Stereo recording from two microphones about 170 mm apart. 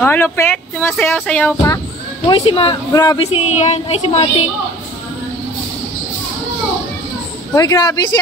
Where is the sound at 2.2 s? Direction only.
30° left (ahead or behind).